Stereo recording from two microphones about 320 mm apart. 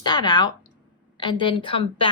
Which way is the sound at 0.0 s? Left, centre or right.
Centre.